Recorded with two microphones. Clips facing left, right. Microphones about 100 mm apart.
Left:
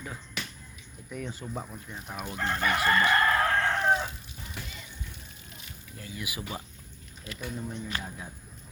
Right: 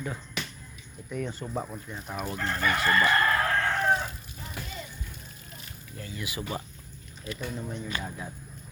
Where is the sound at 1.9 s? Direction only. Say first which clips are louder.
Right 3 dB; 5° left (ahead or behind).